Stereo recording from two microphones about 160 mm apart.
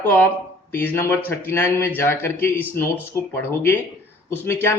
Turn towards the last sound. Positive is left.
turn(degrees=15)  # may be behind; listen again after turning